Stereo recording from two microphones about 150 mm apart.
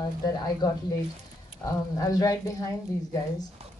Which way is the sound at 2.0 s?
25° left (ahead or behind).